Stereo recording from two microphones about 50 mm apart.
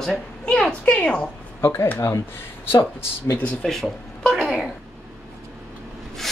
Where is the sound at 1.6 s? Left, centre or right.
Left.